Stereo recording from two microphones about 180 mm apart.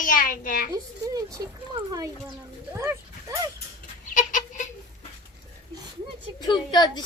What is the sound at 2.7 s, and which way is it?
Dog, 15° right (ahead or behind).